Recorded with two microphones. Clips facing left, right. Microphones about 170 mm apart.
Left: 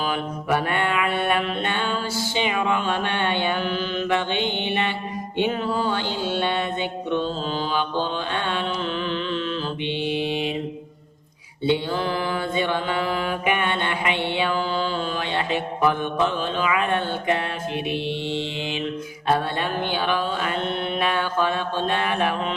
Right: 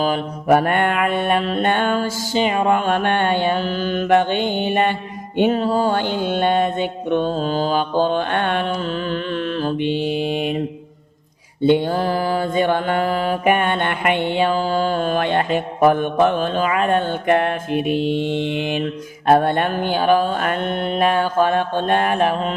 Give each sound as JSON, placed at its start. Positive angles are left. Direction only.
{"t": 0.0, "sound": "mantra", "side_deg": -45}
{"t": 9.6, "sound": "mantra", "side_deg": -45}
{"t": 11.6, "sound": "mantra", "side_deg": -50}